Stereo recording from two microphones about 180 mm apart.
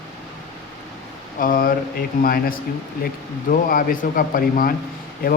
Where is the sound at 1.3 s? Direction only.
50° left (ahead or behind).